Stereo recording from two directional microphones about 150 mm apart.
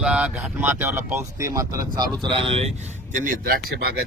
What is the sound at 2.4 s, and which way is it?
Speech, 40° right (ahead or behind).